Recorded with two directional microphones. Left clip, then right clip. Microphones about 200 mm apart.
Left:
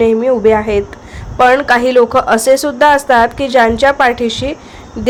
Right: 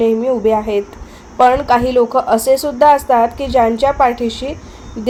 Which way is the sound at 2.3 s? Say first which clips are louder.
Left 2 dB; 15° left (ahead or behind).